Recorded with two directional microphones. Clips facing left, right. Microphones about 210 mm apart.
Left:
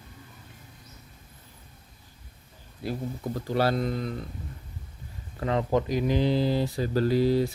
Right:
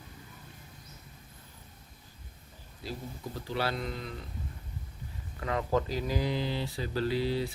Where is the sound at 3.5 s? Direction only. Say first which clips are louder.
Left 8 dB; 40° left (ahead or behind).